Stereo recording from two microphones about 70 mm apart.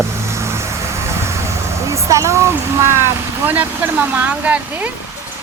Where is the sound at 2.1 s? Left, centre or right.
Right.